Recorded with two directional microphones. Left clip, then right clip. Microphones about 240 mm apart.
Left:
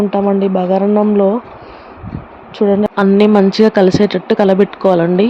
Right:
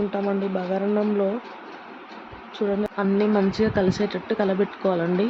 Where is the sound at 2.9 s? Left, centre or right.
Left.